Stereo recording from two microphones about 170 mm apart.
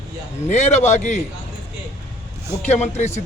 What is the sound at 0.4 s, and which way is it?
Speech, 40° left (ahead or behind).